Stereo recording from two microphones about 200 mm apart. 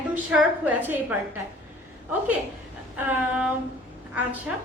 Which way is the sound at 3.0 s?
5° right (ahead or behind).